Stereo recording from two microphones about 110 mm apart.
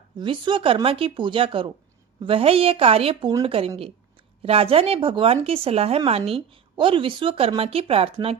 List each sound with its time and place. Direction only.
0.2 s a woman's voice: 45° right (ahead or behind)